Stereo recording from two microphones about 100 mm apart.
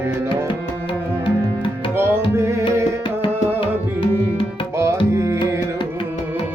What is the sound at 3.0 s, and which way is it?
Tabla, 55° left (ahead or behind).